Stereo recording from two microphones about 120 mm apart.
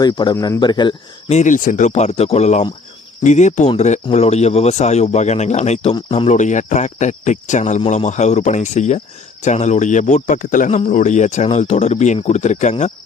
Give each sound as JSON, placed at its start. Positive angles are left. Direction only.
{"t": 0.0, "sound": "speech", "side_deg": 35}
{"t": 0.3, "sound": "speech", "side_deg": 25}
{"t": 0.6, "sound": "speech", "side_deg": 40}
{"t": 1.3, "sound": "speech", "side_deg": 85}
{"t": 3.2, "sound": "speech", "side_deg": 80}
{"t": 6.1, "sound": "speech", "side_deg": 80}